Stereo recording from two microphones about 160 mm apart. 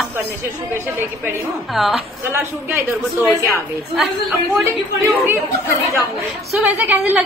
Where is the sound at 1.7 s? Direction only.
Centre (ahead or behind).